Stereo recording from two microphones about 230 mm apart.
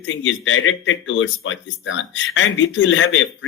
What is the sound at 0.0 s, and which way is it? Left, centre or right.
Speech, left.